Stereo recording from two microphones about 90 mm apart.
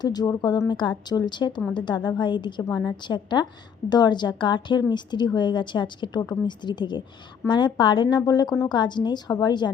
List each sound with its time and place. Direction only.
0.0 s a woman's voice: 50° left (ahead or behind)
8.2 s a woman's voice: 50° left (ahead or behind)